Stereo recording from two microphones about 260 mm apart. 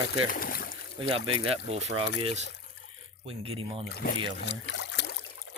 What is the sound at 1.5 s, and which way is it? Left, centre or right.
Speech, right.